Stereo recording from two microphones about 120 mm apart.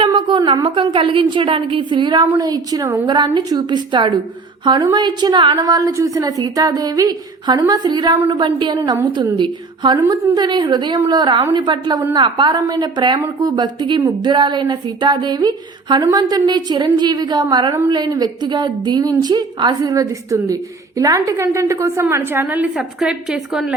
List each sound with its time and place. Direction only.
0.0 s a woman's voice: 45° right (ahead or behind); by 3.0 s 30° right (ahead or behind)
3.1 s a woman's voice: 40° right (ahead or behind)
8.2 s a woman's voice: 45° right (ahead or behind); by 23.7 s 5° right (ahead or behind)